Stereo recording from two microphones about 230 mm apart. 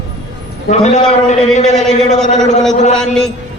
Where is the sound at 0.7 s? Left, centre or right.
Left.